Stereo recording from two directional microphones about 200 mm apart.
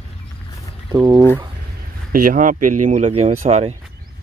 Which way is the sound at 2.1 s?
40° right (ahead or behind).